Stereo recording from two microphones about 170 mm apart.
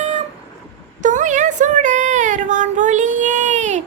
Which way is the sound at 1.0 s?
45° right (ahead or behind).